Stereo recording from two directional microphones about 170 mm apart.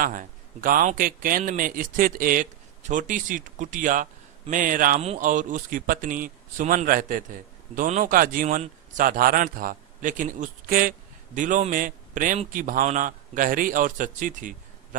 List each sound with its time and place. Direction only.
0.0 s a man's voice: 55° right (ahead or behind)